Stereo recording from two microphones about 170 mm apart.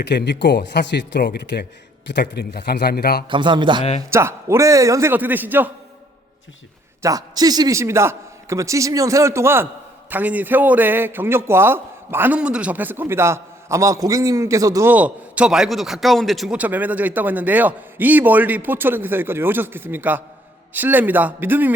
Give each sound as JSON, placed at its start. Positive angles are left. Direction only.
{"t": 0.0, "sound": "speech", "side_deg": 90}
{"t": 2.3, "sound": "a man's voice", "side_deg": 70}
{"t": 3.2, "sound": "a man's voice", "side_deg": -30}
{"t": 4.1, "sound": "a man's voice", "side_deg": -15}
{"t": 7.0, "sound": "a man's voice", "side_deg": -20}